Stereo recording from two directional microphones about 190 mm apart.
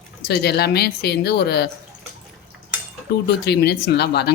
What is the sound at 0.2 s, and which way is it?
Speech, 55° left (ahead or behind).